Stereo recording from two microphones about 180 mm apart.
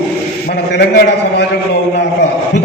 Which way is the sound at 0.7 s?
70° left (ahead or behind).